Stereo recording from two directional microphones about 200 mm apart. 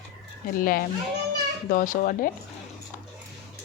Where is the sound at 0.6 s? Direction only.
45° left (ahead or behind).